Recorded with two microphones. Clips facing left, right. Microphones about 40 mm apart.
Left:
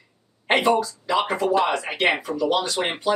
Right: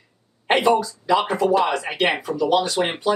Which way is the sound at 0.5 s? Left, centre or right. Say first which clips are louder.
Right 2 dB; centre.